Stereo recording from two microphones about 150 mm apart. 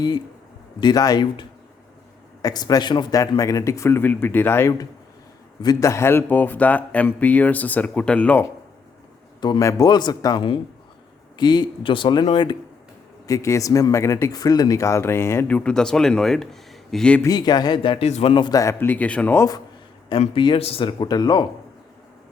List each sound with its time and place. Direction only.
0.8 s speech: 25° left (ahead or behind); by 8.4 s 10° left (ahead or behind)
9.4 s speech: 25° left (ahead or behind)
13.2 s speech: 20° left (ahead or behind)
17.2 s speech: 30° left (ahead or behind); by 19.5 s 10° left (ahead or behind)
20.1 s speech: 35° left (ahead or behind)